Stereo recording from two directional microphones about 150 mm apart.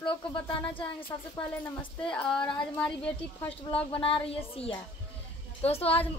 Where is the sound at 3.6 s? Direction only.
40° left (ahead or behind).